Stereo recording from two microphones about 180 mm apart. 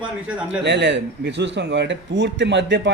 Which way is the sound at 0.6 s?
75° right (ahead or behind).